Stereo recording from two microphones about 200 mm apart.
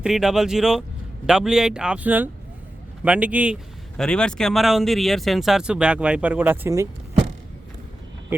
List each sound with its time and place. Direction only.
0.0 s speech: 5° right (ahead or behind)